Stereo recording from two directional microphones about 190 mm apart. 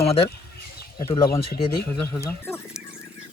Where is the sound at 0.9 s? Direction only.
20° left (ahead or behind).